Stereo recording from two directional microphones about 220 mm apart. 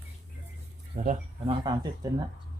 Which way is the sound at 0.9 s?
35° right (ahead or behind).